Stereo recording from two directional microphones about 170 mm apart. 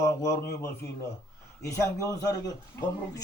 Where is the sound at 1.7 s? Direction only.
20° left (ahead or behind).